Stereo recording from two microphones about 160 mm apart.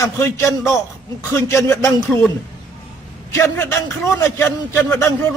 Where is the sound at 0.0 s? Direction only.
15° left (ahead or behind).